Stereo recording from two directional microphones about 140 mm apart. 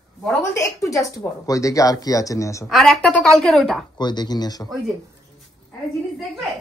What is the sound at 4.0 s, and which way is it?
Speech, 30° left (ahead or behind).